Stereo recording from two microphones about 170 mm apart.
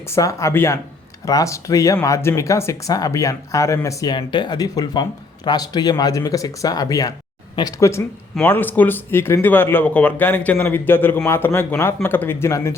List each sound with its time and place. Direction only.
0.1 s speech: 20° left (ahead or behind)